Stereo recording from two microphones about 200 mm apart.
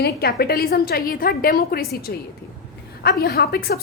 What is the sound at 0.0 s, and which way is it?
A woman's voice, 50° left (ahead or behind).